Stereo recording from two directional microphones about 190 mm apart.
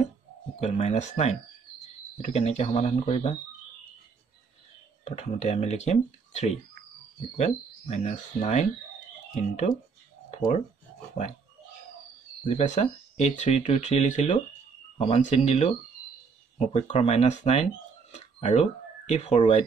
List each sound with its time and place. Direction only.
0.6 s speech: 40° left (ahead or behind)
5.0 s speech: 35° left (ahead or behind)
12.4 s speech: 35° left (ahead or behind)